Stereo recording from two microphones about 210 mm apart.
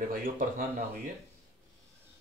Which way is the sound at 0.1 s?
40° right (ahead or behind).